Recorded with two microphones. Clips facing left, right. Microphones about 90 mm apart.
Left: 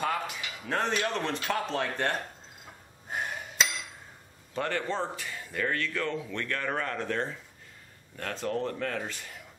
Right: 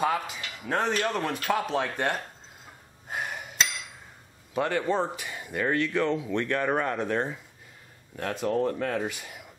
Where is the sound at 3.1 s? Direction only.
5° right (ahead or behind).